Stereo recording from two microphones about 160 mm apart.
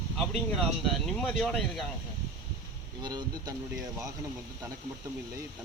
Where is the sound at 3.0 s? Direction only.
25° right (ahead or behind).